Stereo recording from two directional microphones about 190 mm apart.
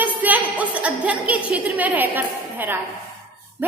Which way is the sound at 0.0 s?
10° right (ahead or behind).